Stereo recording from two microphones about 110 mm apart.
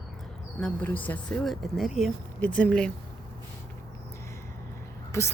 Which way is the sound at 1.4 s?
Centre (ahead or behind).